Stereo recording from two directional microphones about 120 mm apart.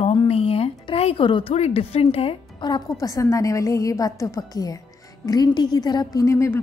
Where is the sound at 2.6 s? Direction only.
35° left (ahead or behind).